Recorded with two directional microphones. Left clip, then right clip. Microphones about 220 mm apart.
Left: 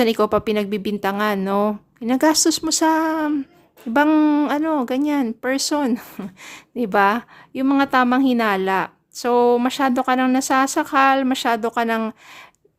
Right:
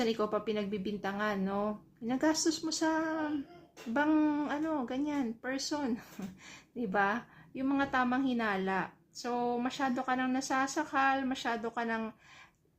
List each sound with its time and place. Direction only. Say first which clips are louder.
0.0 s speech: left 14 dB; 50° left (ahead or behind)